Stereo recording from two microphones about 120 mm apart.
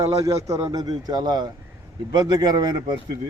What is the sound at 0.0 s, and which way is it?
Speech, 25° right (ahead or behind).